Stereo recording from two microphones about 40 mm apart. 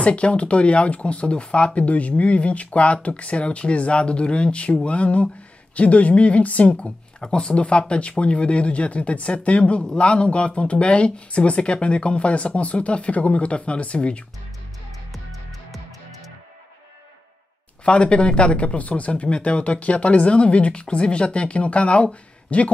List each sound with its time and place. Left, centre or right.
0.0 s speech: left
17.8 s speech: left